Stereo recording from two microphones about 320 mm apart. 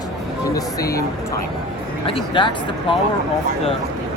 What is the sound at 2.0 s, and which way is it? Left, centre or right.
Speech, centre.